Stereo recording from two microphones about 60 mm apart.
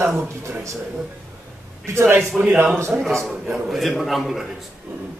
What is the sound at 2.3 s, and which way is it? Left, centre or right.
Speech, centre.